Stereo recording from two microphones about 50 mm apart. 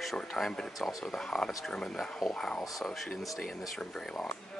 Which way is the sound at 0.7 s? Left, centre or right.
Centre.